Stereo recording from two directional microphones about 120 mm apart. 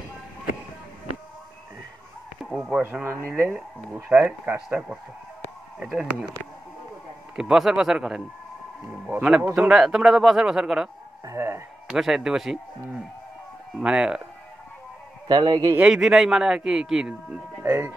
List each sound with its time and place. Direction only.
2.5 s a man's voice: 10° right (ahead or behind)
7.3 s a man's voice: 5° right (ahead or behind)
11.2 s speech: 20° right (ahead or behind)
11.9 s a man's voice: 5° right (ahead or behind)
15.2 s a man's voice: 35° right (ahead or behind)
15.7 s a man's voice: 5° right (ahead or behind)